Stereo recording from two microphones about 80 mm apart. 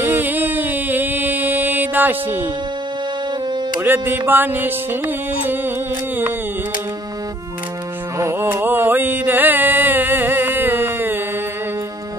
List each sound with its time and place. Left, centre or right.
0.0 s music: right
3.8 s music: right
8.2 s a sound: right